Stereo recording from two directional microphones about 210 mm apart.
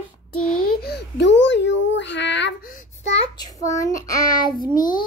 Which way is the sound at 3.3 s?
20° left (ahead or behind).